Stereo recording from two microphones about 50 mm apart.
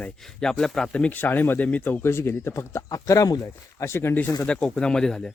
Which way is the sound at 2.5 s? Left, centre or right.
Left.